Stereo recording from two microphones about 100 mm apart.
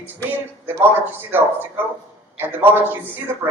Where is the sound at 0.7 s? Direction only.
20° right (ahead or behind).